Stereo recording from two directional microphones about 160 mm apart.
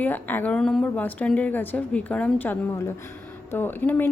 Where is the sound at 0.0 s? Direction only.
10° left (ahead or behind).